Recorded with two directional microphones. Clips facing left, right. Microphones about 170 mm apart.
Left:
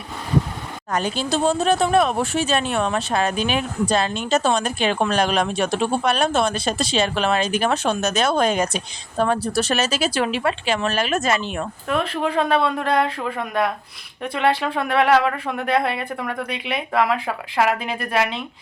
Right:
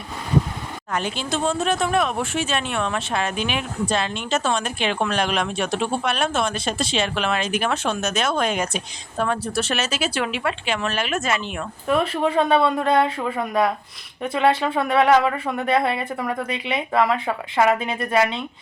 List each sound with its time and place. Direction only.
0.9 s speech: 40° left (ahead or behind)
11.9 s speech: 5° right (ahead or behind)